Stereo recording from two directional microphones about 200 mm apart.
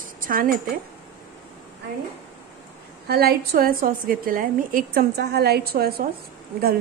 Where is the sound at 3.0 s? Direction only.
50° right (ahead or behind).